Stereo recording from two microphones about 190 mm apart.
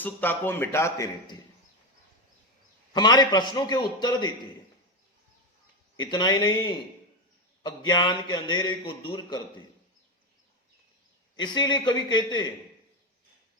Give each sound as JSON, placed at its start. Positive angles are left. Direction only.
{"t": 0.0, "sound": "a man's voice", "side_deg": 10}
{"t": 2.9, "sound": "a man's voice", "side_deg": 20}
{"t": 6.0, "sound": "a man's voice", "side_deg": 20}
{"t": 7.9, "sound": "a man's voice", "side_deg": 20}
{"t": 11.3, "sound": "a man's voice", "side_deg": 25}